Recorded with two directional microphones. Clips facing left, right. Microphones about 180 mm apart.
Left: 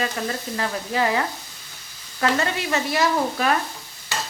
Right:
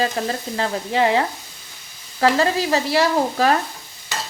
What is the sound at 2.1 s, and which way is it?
Speech, 30° right (ahead or behind).